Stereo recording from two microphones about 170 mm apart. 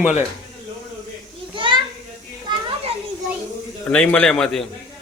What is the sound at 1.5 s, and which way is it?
Children playing, 30° right (ahead or behind).